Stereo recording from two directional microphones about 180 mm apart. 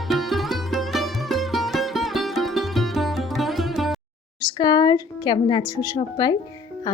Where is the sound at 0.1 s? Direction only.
Centre (ahead or behind).